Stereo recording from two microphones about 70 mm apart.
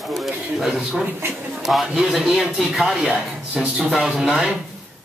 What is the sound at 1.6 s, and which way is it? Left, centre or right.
A man's voice, centre.